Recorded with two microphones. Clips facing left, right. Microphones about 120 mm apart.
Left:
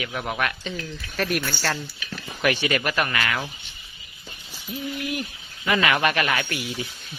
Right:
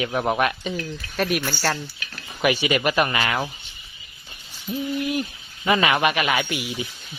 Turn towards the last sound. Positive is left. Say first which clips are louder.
# right 2 dB
turn(degrees=-15)  # may be behind; listen again after turning